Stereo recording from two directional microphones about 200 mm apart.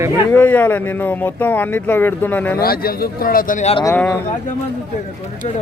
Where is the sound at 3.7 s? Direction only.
15° left (ahead or behind).